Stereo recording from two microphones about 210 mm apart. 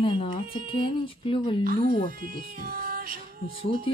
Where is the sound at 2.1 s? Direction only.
45° right (ahead or behind).